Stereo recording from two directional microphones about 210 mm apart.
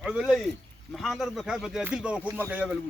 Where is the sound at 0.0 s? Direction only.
Centre (ahead or behind).